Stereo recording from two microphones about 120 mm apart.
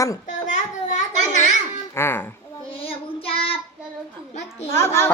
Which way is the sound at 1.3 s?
85° left.